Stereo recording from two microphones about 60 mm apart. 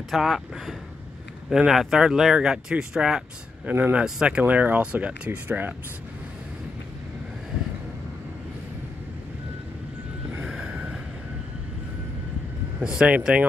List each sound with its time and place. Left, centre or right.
0.1 s speech: centre
3.6 s speech: right
4.0 s speech: centre
10.5 s vehicle: centre
12.8 s speech: centre
13.1 s speech: right